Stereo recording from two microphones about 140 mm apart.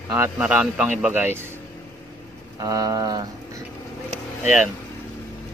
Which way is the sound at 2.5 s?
25° right (ahead or behind).